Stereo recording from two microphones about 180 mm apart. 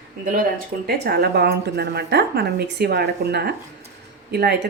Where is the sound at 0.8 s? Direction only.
65° right (ahead or behind).